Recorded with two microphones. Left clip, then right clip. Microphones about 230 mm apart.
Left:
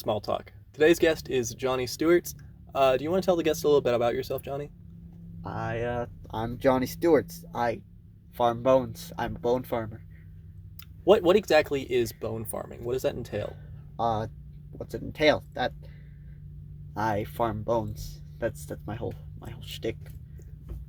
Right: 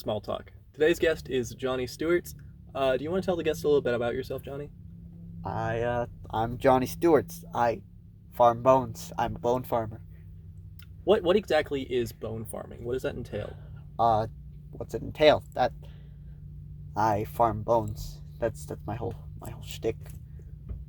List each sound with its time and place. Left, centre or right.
0.1 s speech: left
5.4 s speech: right
11.0 s speech: left
13.9 s speech: right
16.9 s speech: right